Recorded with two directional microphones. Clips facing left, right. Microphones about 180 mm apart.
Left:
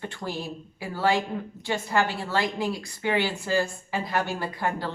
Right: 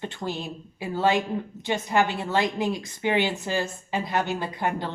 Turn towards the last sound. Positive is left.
turn(degrees=-20)  # may be behind; listen again after turning